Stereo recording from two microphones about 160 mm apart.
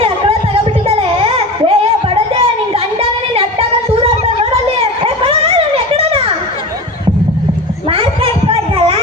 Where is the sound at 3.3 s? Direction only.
35° right (ahead or behind).